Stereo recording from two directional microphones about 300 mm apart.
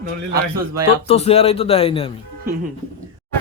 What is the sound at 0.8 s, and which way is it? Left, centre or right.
Speech, centre.